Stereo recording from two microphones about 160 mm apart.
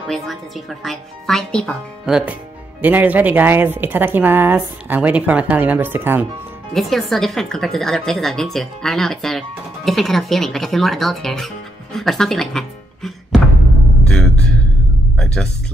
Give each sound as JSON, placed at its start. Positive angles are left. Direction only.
{"t": 0.1, "sound": "a woman's voice", "side_deg": 0}
{"t": 6.7, "sound": "a woman's voice", "side_deg": 0}
{"t": 14.0, "sound": "a sound", "side_deg": 5}
{"t": 15.1, "sound": "music", "side_deg": 5}